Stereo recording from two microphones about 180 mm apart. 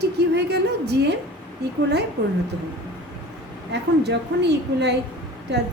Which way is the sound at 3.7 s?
70° right (ahead or behind).